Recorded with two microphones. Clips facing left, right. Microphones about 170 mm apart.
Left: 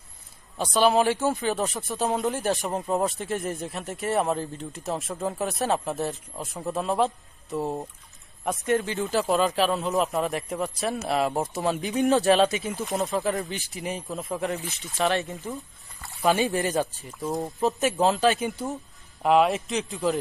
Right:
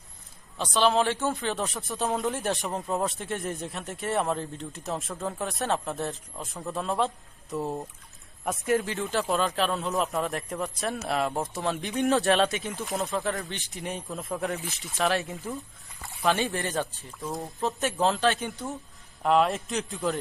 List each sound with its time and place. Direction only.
0.6 s speech: 10° left (ahead or behind)
5.1 s speech: 15° left (ahead or behind)
5.4 s speech: 5° left (ahead or behind)
7.6 s speech: 25° left (ahead or behind)
8.4 s speech: centre (ahead or behind)
16.2 s speech: 15° left (ahead or behind)
18.0 s speech: 5° left (ahead or behind)